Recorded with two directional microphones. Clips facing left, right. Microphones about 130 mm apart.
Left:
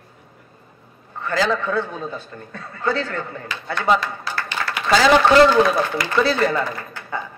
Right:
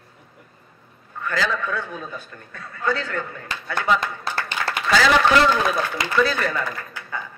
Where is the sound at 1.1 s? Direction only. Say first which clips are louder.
Left 4 dB; 30° left (ahead or behind).